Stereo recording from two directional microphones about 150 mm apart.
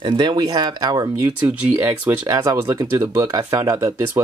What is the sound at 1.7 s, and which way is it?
Speech, 15° right (ahead or behind).